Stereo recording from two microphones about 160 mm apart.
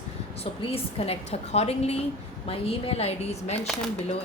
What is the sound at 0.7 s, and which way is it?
A woman's voice, 40° left (ahead or behind).